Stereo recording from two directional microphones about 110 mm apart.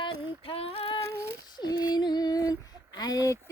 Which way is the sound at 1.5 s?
40° left (ahead or behind).